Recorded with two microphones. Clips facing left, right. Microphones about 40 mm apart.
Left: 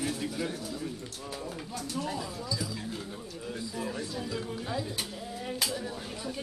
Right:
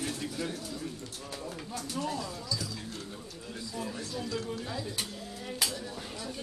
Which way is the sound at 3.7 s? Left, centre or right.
Centre.